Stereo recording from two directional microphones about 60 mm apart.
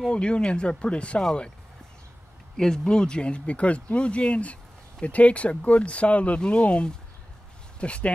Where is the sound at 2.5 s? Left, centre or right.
Centre.